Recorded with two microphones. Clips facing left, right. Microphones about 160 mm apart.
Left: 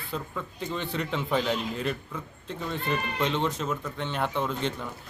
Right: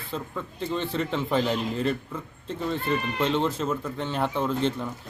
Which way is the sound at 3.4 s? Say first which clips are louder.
Right 3 dB; 30° right (ahead or behind).